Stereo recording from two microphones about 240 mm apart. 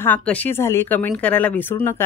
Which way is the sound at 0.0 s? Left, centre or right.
Centre.